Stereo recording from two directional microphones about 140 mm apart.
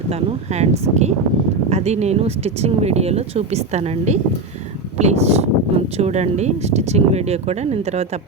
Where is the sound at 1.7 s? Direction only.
50° right (ahead or behind).